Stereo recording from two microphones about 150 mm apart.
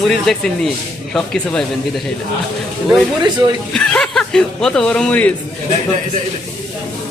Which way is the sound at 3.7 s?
5° left (ahead or behind).